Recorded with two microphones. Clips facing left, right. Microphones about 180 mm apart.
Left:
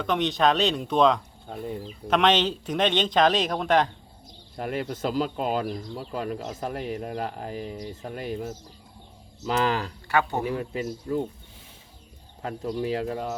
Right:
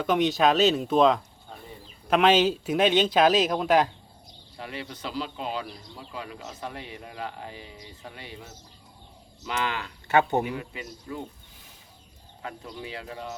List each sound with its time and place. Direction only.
0.0 s speech: 5° right (ahead or behind)
4.5 s speech: 45° left (ahead or behind)
10.1 s speech: 20° right (ahead or behind)
10.4 s speech: 40° left (ahead or behind)
12.4 s speech: 45° left (ahead or behind)